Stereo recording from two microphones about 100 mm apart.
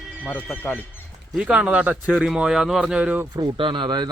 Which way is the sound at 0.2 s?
20° left (ahead or behind).